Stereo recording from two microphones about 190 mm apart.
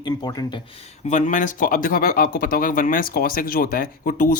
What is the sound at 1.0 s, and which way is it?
Speech, 40° left (ahead or behind).